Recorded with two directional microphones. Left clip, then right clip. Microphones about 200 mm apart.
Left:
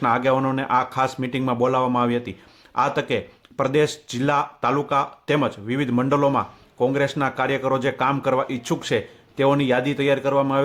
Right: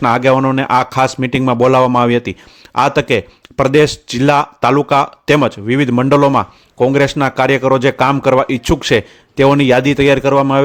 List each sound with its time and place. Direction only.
0.0 s speech: 40° right (ahead or behind)